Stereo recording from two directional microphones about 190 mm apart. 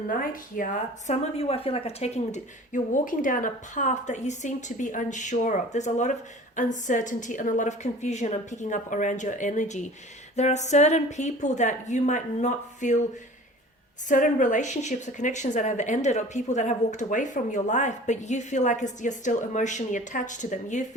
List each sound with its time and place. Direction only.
0.1 s a woman's voice: 45° left (ahead or behind)
14.1 s a woman's voice: 40° left (ahead or behind)